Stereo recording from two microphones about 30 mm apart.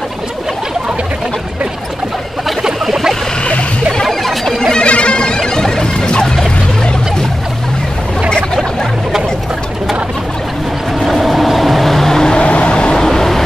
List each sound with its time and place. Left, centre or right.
2.6 s a sound: centre
4.0 s music: centre
4.7 s bagpipes: left
5.9 s music: left
11.1 s train: centre
12.4 s vehicle: left
12.9 s vehicle: centre